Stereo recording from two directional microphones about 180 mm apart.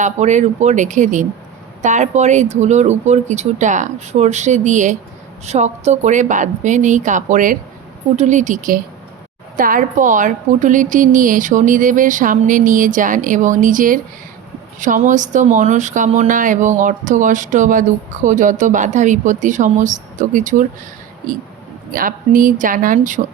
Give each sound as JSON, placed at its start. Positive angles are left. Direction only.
{"t": 0.0, "sound": "speech", "side_deg": -40}
{"t": 21.9, "sound": "speech", "side_deg": -50}